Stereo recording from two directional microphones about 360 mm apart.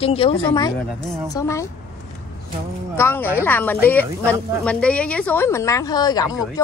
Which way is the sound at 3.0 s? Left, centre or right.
Centre.